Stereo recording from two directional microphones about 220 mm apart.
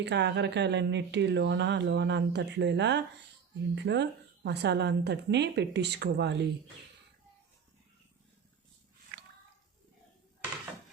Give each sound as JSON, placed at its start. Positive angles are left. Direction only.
{"t": 0.0, "sound": "speech", "side_deg": -50}